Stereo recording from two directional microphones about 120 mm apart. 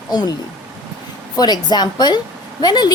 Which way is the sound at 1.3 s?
35° left (ahead or behind).